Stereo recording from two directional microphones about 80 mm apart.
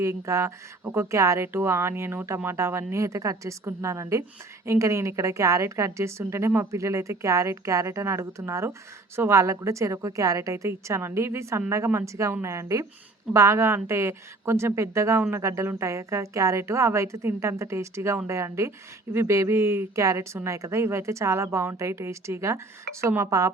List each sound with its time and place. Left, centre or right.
0.0 s speech: right